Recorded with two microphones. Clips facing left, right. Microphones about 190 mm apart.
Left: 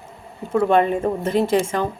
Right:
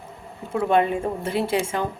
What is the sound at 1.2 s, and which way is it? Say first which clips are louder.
Speech: left 6 dB; 10° right (ahead or behind).